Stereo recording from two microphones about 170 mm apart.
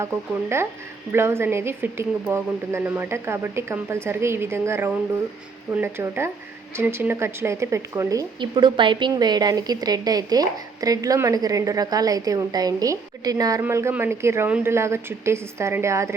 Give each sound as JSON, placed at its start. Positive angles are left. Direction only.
{"t": 1.1, "sound": "a woman's voice", "side_deg": -15}